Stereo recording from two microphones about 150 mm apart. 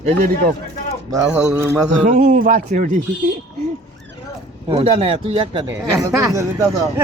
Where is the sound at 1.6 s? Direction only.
15° right (ahead or behind).